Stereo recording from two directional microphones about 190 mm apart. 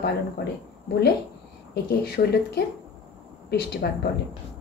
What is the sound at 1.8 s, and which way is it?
Speech, 55° left (ahead or behind).